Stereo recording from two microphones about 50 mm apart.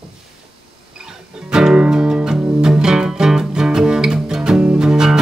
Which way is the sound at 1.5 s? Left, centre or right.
Centre.